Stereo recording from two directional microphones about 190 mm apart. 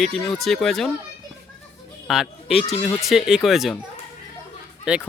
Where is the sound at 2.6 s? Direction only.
30° left (ahead or behind).